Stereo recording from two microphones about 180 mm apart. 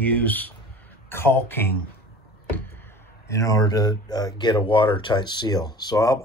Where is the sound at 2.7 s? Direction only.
10° left (ahead or behind).